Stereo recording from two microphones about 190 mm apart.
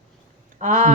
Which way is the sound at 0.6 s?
40° right (ahead or behind).